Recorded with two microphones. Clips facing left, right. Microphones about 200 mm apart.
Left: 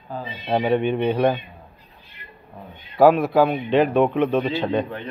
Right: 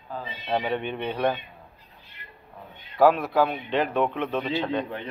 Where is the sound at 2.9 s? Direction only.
10° left (ahead or behind).